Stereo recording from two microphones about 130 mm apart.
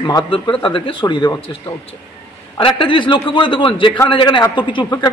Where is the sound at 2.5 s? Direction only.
40° left (ahead or behind).